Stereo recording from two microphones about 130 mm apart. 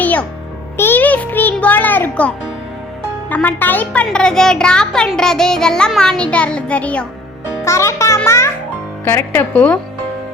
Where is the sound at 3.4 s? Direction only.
15° left (ahead or behind).